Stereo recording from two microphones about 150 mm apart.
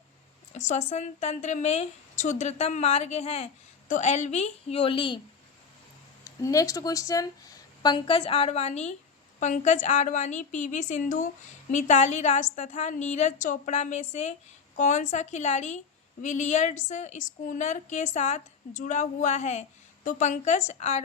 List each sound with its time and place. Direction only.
0.5 s a woman's voice: 50° left (ahead or behind); by 5.2 s 35° left (ahead or behind)
6.4 s a woman's voice: 20° left (ahead or behind); by 21.0 s 50° left (ahead or behind)